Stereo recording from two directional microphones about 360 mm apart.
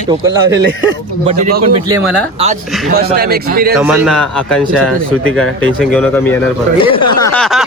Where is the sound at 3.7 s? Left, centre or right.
Centre.